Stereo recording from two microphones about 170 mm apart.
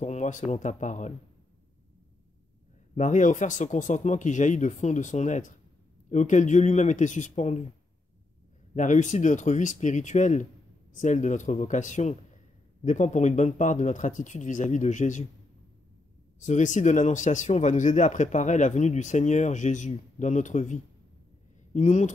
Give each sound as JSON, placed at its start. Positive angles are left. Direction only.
{"t": 0.0, "sound": "speech", "side_deg": 45}
{"t": 3.0, "sound": "speech", "side_deg": 45}
{"t": 8.7, "sound": "speech", "side_deg": 45}
{"t": 16.3, "sound": "speech", "side_deg": 45}